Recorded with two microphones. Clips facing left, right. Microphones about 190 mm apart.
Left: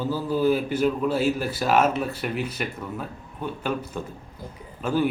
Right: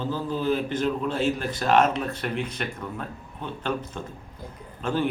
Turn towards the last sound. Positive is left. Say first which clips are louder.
# left 2 dB
turn(degrees=5)  # may be behind; listen again after turning